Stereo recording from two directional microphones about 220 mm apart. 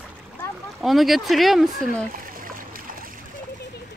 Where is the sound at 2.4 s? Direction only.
40° right (ahead or behind).